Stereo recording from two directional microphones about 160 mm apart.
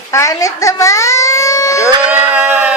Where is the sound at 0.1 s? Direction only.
20° left (ahead or behind).